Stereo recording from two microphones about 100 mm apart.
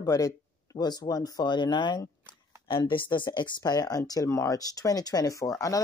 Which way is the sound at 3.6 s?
40° left (ahead or behind).